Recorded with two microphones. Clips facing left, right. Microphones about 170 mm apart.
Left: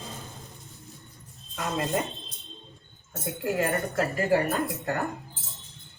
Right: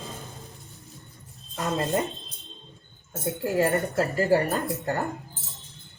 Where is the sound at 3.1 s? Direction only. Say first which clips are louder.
Right 3 dB; 25° right (ahead or behind).